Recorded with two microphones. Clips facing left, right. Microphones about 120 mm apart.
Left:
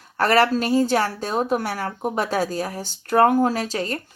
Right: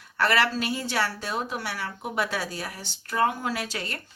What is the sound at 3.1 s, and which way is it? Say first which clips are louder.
Speech: left 9 dB; 50° left (ahead or behind).